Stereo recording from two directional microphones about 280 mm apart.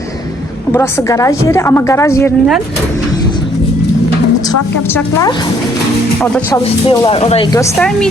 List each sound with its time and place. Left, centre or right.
0.7 s a woman's voice: centre
6.8 s speech: centre
7.8 s a woman's voice: centre